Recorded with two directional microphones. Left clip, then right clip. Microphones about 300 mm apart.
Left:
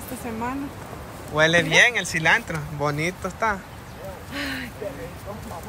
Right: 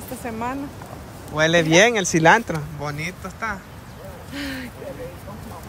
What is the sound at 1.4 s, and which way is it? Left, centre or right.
Speech, centre.